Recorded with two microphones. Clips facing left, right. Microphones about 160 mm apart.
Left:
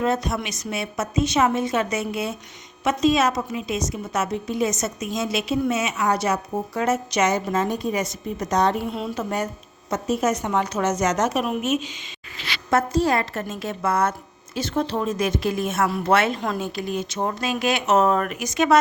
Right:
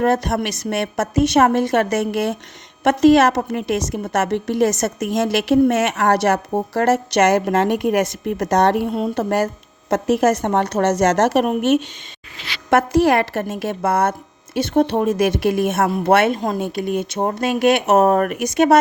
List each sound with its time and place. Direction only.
0.0 s a woman's voice: 65° right (ahead or behind)
12.7 s a woman's voice: 90° right
13.5 s a woman's voice: 65° right (ahead or behind)
15.8 s a woman's voice: 50° right (ahead or behind)
16.4 s a woman's voice: 45° right (ahead or behind)
16.6 s speech: 60° right (ahead or behind)